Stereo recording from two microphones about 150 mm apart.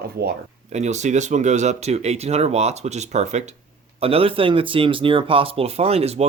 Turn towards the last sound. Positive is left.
turn(degrees=-45)  # may be behind; listen again after turning